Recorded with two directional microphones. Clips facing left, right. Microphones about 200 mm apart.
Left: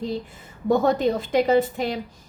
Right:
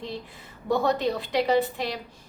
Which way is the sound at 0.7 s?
45° left (ahead or behind).